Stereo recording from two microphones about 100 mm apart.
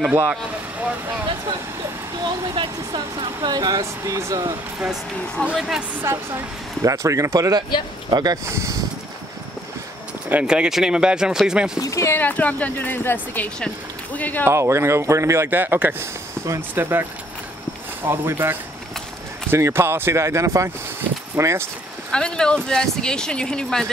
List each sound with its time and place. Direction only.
0.1 s speech: 15° right (ahead or behind)
2.5 s speech: 55° right (ahead or behind); by 4.6 s 35° right (ahead or behind)
5.6 s speech: 5° right (ahead or behind)
5.9 s speech: 25° right (ahead or behind); by 8.4 s 45° right (ahead or behind)
8.5 s speech: 30° right (ahead or behind)
10.3 s speech: 10° right (ahead or behind)
11.8 s speech: 30° left (ahead or behind)
12.2 s speech: 15° left (ahead or behind)
14.4 s speech: 30° right (ahead or behind)
22.1 s speech: 10° left (ahead or behind)